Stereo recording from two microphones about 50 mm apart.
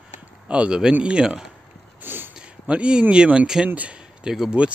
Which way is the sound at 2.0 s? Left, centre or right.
Right.